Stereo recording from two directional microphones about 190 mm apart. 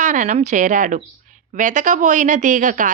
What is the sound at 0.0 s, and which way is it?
A woman's voice, 40° right (ahead or behind).